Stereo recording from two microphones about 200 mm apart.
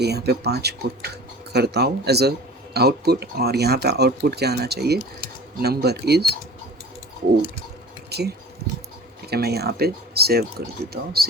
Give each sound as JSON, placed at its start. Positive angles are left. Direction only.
{"t": 0.0, "sound": "speech", "side_deg": -55}
{"t": 8.1, "sound": "speech", "side_deg": -55}